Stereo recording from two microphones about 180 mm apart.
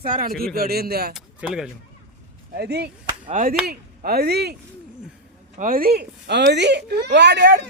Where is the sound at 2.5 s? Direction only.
60° right (ahead or behind).